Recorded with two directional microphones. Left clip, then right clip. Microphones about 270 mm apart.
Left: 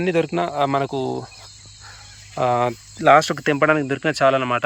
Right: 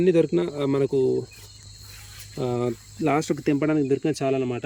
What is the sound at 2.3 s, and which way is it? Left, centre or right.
Speech, left.